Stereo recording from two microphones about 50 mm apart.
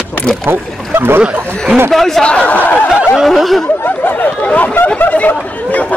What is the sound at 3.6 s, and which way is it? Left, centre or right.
Speech, left.